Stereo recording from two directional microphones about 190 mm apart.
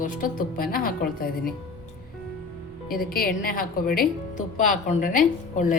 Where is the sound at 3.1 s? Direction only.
50° left (ahead or behind).